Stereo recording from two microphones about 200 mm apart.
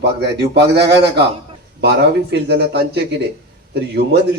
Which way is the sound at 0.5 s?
55° right (ahead or behind).